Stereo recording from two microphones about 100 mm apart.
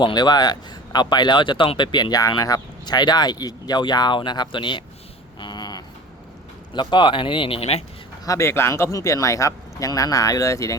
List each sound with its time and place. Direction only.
0.0 s speech: 45° left (ahead or behind)
5.4 s a sound: 45° left (ahead or behind)
6.7 s speech: 55° left (ahead or behind); by 7.9 s 90° left
8.2 s speech: 30° left (ahead or behind)